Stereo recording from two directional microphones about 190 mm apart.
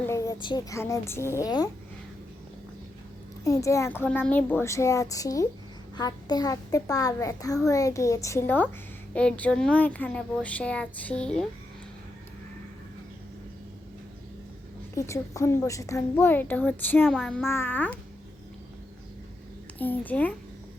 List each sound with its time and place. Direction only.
0.0 s speech: 15° left (ahead or behind)
3.4 s a child's voice: 15° left (ahead or behind)
14.9 s a child's voice: 15° left (ahead or behind)
17.4 s a child's voice: 10° left (ahead or behind)
19.8 s a child's voice: 10° left (ahead or behind)